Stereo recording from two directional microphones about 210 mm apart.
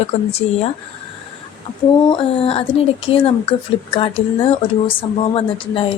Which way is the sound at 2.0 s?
25° left (ahead or behind).